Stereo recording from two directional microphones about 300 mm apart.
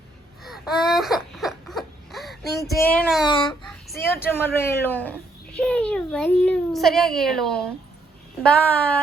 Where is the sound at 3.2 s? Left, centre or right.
Centre.